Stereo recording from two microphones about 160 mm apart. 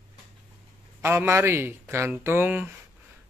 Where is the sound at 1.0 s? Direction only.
15° right (ahead or behind).